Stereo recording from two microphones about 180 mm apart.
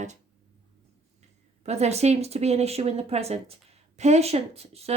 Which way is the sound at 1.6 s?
35° right (ahead or behind).